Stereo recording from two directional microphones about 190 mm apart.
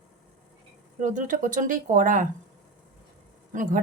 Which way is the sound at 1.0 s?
45° right (ahead or behind).